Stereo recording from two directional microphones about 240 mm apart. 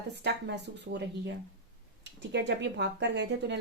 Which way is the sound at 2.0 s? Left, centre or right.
Right.